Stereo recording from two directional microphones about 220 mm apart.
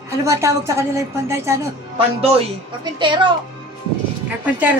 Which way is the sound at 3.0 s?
20° right (ahead or behind).